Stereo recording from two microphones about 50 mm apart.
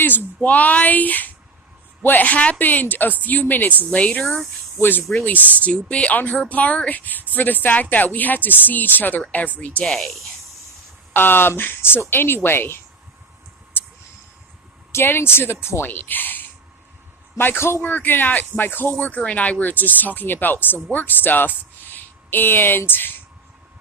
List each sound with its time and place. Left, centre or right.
0.0 s speech: left
4.8 s speech: left
5.6 s speech: left
9.8 s speech: centre
11.1 s speech: left
14.9 s speech: left
15.9 s speech: left
17.8 s speech: left
18.9 s speech: left